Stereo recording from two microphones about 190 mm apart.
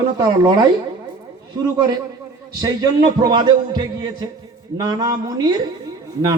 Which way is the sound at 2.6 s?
20° right (ahead or behind).